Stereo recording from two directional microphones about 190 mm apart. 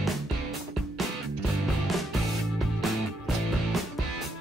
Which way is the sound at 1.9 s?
Centre (ahead or behind).